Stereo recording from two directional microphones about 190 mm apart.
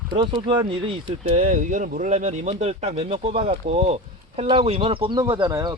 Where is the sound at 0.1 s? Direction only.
25° right (ahead or behind).